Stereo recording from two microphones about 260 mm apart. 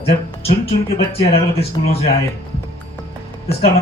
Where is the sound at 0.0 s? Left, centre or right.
Left.